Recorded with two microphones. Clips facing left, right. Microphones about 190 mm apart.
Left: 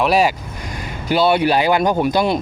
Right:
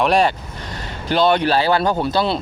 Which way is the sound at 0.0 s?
5° left (ahead or behind).